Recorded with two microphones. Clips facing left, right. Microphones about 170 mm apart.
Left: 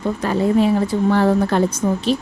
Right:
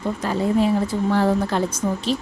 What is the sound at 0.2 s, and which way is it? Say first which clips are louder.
A woman's voice: left 3 dB; 65° left (ahead or behind).